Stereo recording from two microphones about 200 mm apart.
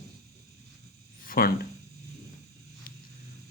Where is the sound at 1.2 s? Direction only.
45° left (ahead or behind).